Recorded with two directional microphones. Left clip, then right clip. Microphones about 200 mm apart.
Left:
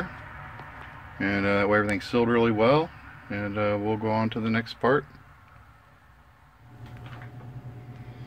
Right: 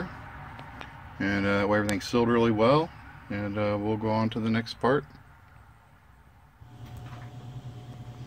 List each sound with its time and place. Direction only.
1.1 s speech: centre (ahead or behind)